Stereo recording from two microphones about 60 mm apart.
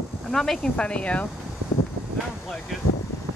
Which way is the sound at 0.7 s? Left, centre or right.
Centre.